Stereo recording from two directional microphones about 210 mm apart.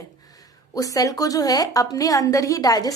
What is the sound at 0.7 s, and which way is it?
A woman's voice, 15° left (ahead or behind).